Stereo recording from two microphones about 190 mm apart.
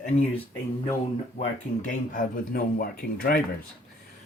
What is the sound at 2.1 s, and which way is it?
Speech, 45° left (ahead or behind).